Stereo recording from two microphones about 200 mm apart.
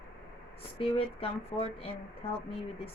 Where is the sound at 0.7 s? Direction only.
30° left (ahead or behind).